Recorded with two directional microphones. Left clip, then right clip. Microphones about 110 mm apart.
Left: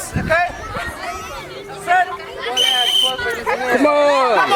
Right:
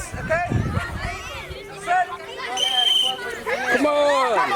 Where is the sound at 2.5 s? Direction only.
20° left (ahead or behind).